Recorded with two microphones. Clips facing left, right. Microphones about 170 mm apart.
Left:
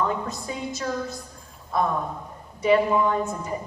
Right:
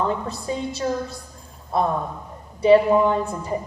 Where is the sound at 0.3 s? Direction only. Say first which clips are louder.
Right 4 dB; 30° right (ahead or behind).